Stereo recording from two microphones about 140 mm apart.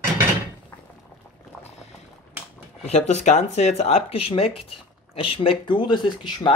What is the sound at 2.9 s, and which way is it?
Speech, 50° left (ahead or behind).